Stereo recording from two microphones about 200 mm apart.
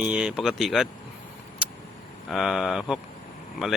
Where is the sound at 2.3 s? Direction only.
Centre (ahead or behind).